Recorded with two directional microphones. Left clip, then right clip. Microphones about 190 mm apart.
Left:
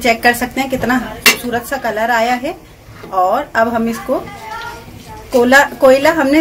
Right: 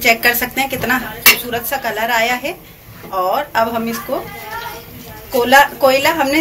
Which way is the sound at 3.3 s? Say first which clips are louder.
Left 2 dB; 25° left (ahead or behind).